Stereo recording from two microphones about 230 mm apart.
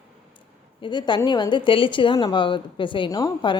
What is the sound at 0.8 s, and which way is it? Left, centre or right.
Speech, centre.